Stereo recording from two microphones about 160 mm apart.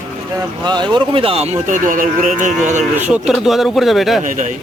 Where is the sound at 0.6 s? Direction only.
30° right (ahead or behind); by 2.8 s 50° right (ahead or behind).